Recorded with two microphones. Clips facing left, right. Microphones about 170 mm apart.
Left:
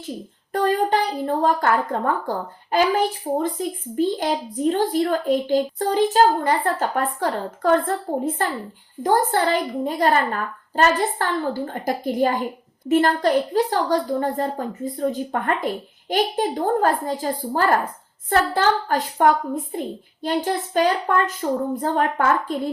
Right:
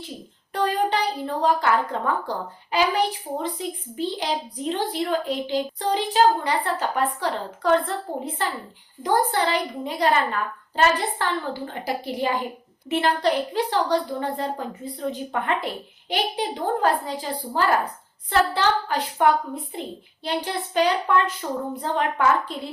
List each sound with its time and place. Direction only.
0.5 s speech: 45° left (ahead or behind)